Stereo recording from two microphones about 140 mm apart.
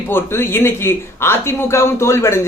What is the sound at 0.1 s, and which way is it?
Speech, 15° left (ahead or behind).